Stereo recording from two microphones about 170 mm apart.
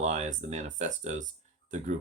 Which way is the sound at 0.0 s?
45° right (ahead or behind).